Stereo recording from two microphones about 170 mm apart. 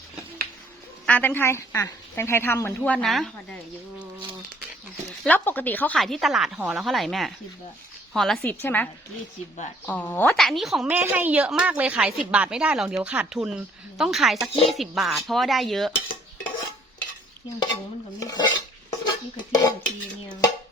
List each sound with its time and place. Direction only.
1.0 s speech: 10° left (ahead or behind)
5.2 s speech: 10° left (ahead or behind)
10.4 s a woman's voice: centre (ahead or behind)
18.2 s stir: 20° left (ahead or behind)
18.9 s dishes: 25° left (ahead or behind)
20.2 s a sound: 25° left (ahead or behind)